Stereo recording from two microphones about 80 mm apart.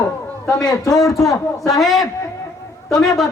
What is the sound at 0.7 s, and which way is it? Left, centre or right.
Speech, left.